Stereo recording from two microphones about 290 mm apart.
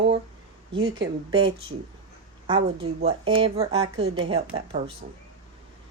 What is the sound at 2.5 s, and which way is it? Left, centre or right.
A woman's voice, centre.